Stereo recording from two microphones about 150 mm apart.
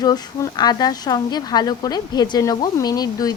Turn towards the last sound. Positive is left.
turn(degrees=25)  # may be behind; listen again after turning